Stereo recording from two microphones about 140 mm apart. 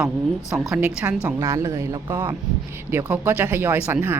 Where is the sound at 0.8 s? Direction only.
15° right (ahead or behind).